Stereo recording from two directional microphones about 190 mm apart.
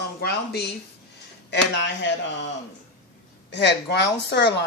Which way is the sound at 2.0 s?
70° left (ahead or behind).